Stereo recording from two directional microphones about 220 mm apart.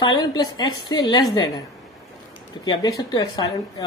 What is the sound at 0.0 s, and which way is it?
A woman's voice, 20° left (ahead or behind).